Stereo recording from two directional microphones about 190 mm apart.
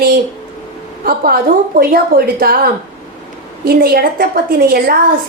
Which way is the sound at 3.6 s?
55° right (ahead or behind).